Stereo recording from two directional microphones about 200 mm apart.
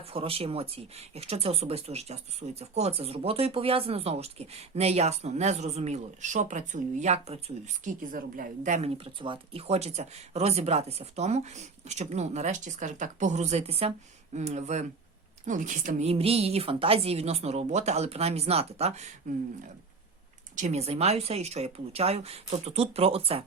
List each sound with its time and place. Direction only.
0.1 s speech: 30° right (ahead or behind)
9.2 s speech: 25° right (ahead or behind)
20.6 s speech: 35° right (ahead or behind)